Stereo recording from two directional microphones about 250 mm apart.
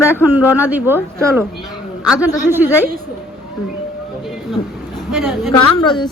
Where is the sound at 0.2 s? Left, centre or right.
Centre.